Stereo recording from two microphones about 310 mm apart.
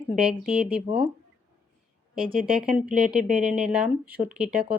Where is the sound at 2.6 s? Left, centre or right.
Centre.